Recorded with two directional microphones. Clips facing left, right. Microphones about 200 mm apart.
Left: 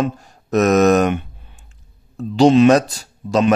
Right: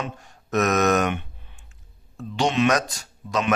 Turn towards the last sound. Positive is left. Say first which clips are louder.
# left 8 dB
turn(degrees=35)  # may be behind; listen again after turning